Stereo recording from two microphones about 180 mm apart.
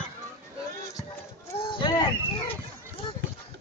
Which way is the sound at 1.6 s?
25° left (ahead or behind).